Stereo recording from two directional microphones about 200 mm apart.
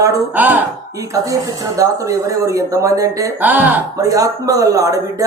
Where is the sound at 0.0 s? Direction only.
10° right (ahead or behind).